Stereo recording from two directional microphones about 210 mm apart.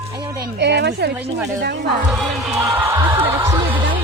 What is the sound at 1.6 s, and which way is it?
Speech, 55° right (ahead or behind).